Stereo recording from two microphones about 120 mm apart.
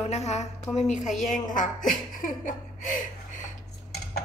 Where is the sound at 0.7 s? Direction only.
75° left (ahead or behind).